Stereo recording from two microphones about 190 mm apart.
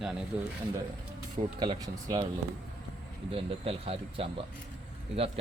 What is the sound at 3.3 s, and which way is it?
Speech, 30° right (ahead or behind).